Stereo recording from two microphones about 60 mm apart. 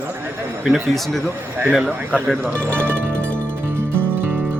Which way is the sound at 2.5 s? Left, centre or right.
Left.